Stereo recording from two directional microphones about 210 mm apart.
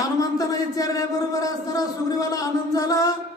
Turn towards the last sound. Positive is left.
turn(degrees=15)  # may be behind; listen again after turning